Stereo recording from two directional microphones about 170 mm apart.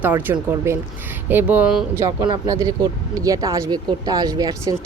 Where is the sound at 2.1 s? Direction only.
25° right (ahead or behind).